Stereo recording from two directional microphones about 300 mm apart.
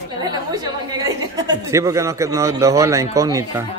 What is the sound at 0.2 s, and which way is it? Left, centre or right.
A woman's voice, centre.